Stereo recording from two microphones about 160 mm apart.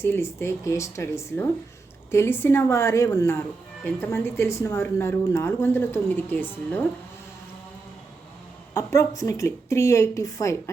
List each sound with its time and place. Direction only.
0.0 s speech: 15° left (ahead or behind)
8.7 s a woman's voice: 20° left (ahead or behind)